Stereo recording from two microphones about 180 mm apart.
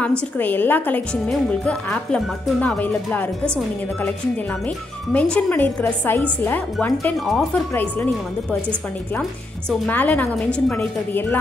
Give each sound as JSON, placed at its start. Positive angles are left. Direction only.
{"t": 0.4, "sound": "a woman's voice", "side_deg": 10}
{"t": 5.1, "sound": "a woman's voice", "side_deg": 10}
{"t": 9.7, "sound": "a woman's voice", "side_deg": 10}